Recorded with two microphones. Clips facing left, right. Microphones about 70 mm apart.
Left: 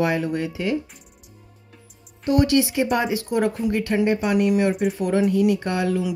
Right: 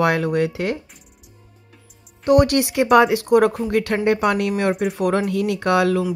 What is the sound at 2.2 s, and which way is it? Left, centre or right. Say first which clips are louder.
Speech: right 3 dB; right.